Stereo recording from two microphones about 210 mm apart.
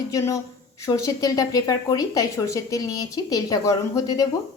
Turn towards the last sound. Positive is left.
turn(degrees=15)  # may be behind; listen again after turning